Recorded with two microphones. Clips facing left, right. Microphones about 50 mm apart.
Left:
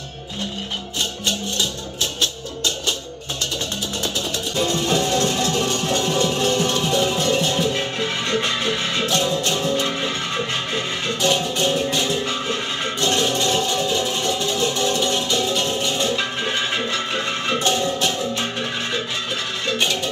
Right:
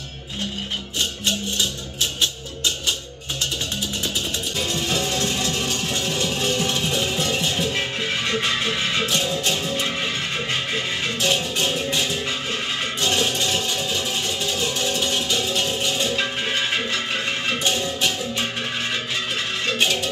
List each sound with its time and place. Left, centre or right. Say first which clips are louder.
4.6 s music: left 5 dB; left
6.6 s music: left 4 dB; centre
13.6 s music: left 4 dB; left
15.3 s music: left 2 dB; centre
19.7 s music: even; centre